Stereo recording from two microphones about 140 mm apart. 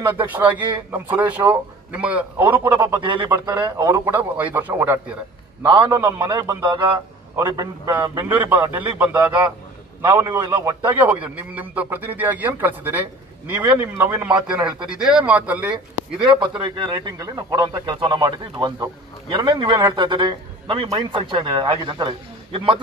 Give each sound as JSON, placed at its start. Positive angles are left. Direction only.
{"t": 0.0, "sound": "a man's voice", "side_deg": -15}
{"t": 3.0, "sound": "speech", "side_deg": -35}
{"t": 3.3, "sound": "a man's voice", "side_deg": -25}
{"t": 4.1, "sound": "a man's voice", "side_deg": -10}
{"t": 14.5, "sound": "a man's voice", "side_deg": -5}
{"t": 15.7, "sound": "speech", "side_deg": -35}